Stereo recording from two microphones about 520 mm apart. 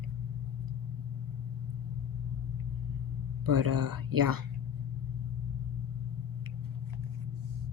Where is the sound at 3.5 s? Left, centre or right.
Right.